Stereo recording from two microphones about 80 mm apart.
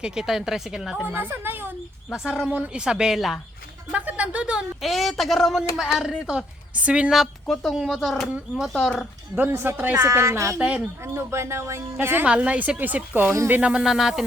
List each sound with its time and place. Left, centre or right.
0.0 s speech: centre
1.0 s a woman's voice: right
2.5 s a woman's voice: centre
3.9 s a woman's voice: centre
4.8 s a woman's voice: centre
7.4 s a woman's voice: centre
7.7 s speech: centre
9.3 s a woman's voice: right
10.0 s speech: right
10.6 s a woman's voice: centre
11.0 s speech: right
12.2 s a woman's voice: centre